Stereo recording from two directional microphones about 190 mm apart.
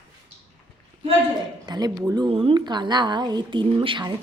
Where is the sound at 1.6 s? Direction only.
20° right (ahead or behind).